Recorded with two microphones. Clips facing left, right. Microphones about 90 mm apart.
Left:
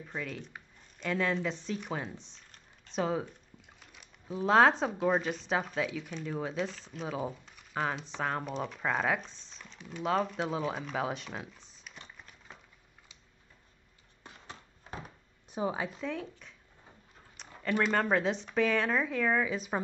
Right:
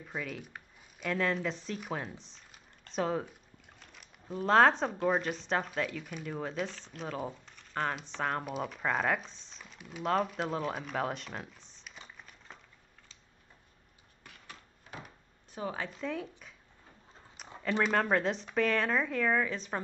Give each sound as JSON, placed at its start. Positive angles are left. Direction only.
{"t": 0.0, "sound": "speech", "side_deg": -5}
{"t": 3.8, "sound": "a sound", "side_deg": 0}
{"t": 5.0, "sound": "speech", "side_deg": 0}
{"t": 14.2, "sound": "a sound", "side_deg": 25}
{"t": 15.5, "sound": "speech", "side_deg": 15}
{"t": 16.0, "sound": "speech", "side_deg": 0}
{"t": 17.6, "sound": "speech", "side_deg": 0}